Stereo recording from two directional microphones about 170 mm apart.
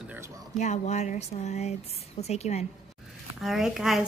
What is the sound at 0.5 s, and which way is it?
A woman's voice, 45° left (ahead or behind).